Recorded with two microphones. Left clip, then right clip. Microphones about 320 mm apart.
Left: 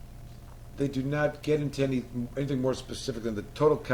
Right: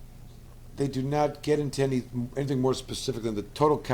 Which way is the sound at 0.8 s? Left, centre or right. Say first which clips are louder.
Right 2 dB; right.